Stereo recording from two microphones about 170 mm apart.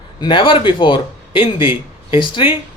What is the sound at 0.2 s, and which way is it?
Speech, 30° left (ahead or behind).